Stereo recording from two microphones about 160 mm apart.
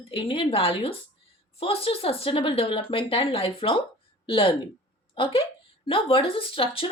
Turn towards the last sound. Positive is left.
turn(degrees=35)  # may be behind; listen again after turning